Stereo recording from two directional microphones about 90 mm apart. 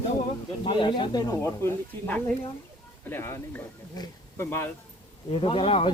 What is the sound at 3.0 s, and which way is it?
Speech, 25° left (ahead or behind).